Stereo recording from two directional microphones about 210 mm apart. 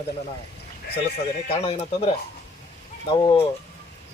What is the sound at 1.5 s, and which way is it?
A man's voice, 30° left (ahead or behind).